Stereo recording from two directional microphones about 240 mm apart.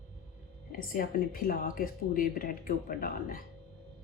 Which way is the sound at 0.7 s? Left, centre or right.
Left.